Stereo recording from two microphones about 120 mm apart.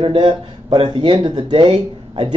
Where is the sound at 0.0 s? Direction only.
45° right (ahead or behind).